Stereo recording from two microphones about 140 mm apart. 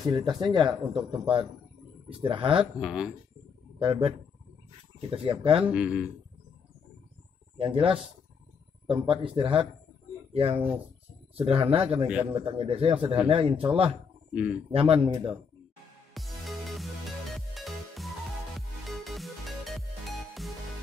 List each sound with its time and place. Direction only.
0.1 s speech: 30° right (ahead or behind)
2.8 s speech: 5° right (ahead or behind)
3.8 s speech: 40° right (ahead or behind)
5.1 s speech: 40° right (ahead or behind)
5.7 s speech: 10° right (ahead or behind)
7.5 s speech: 40° right (ahead or behind)
14.3 s speech: 10° right (ahead or behind)
14.7 s speech: 40° right (ahead or behind)
16.1 s music: centre (ahead or behind)